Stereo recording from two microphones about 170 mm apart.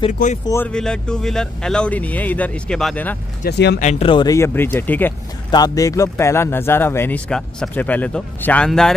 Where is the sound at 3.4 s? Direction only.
75° left (ahead or behind).